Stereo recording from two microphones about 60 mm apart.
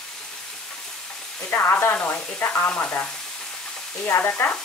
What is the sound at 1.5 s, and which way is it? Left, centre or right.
Speech, left.